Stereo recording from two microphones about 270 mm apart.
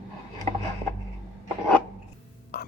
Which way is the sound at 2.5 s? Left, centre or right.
Left.